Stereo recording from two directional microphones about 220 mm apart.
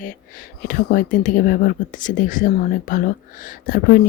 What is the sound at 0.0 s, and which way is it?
Speech, 40° left (ahead or behind).